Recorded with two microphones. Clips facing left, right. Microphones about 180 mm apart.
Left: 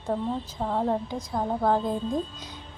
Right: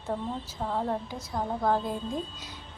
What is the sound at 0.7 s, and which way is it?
A woman's voice, 5° left (ahead or behind).